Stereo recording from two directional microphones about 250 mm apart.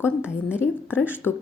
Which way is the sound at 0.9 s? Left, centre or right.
Centre.